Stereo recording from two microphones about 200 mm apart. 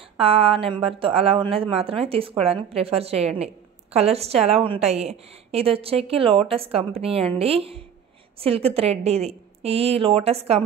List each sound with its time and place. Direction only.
0.2 s a woman's voice: 25° right (ahead or behind)